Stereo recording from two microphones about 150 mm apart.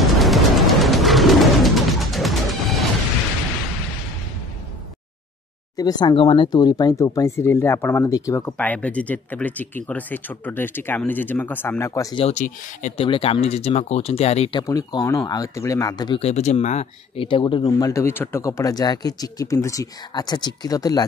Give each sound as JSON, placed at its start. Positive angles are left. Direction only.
{"t": 0.0, "sound": "music", "side_deg": 0}
{"t": 5.8, "sound": "speech", "side_deg": 25}
{"t": 8.5, "sound": "speech", "side_deg": 10}
{"t": 12.4, "sound": "speech", "side_deg": 55}
{"t": 13.0, "sound": "speech", "side_deg": 40}
{"t": 14.5, "sound": "speech", "side_deg": 25}
{"t": 16.2, "sound": "speech", "side_deg": 45}